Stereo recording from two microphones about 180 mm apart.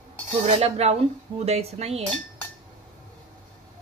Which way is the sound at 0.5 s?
35° right (ahead or behind).